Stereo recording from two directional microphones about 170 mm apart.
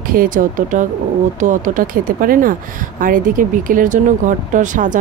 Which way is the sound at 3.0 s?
55° right (ahead or behind).